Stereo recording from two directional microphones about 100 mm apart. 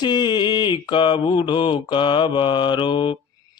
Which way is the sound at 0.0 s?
45° left (ahead or behind).